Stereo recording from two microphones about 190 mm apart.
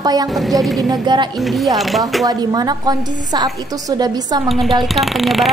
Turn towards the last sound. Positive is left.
turn(degrees=0)  # may be behind; listen again after turning